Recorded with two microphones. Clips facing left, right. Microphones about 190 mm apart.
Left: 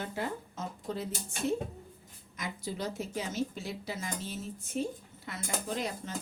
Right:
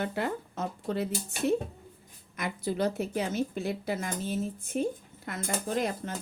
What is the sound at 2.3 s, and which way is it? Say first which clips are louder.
Speech: right 7 dB; 60° right (ahead or behind).